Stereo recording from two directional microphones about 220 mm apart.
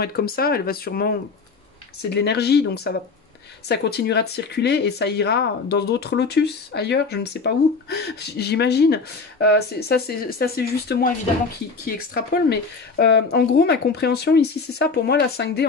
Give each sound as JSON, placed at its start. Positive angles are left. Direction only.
{"t": 0.0, "sound": "speech", "side_deg": 45}